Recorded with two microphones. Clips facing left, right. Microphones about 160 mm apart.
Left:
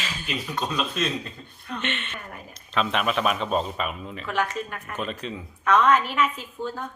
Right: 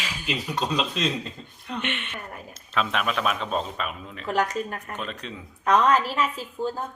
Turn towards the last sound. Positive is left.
turn(degrees=-35)  # may be behind; listen again after turning